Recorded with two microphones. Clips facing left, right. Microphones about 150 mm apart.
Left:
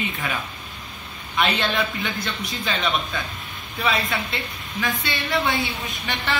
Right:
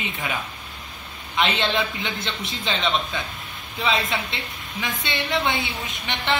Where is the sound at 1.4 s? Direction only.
20° right (ahead or behind).